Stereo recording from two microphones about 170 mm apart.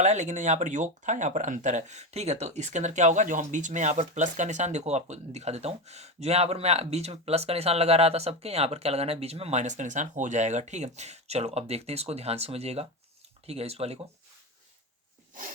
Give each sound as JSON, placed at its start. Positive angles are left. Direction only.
{"t": 0.0, "sound": "speech", "side_deg": -45}